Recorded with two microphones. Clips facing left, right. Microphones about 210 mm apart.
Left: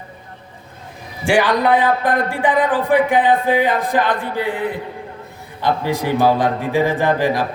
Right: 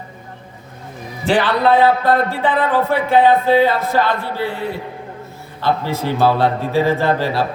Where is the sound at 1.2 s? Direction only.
15° left (ahead or behind).